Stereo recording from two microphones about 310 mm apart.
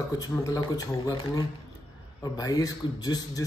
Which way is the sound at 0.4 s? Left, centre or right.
Centre.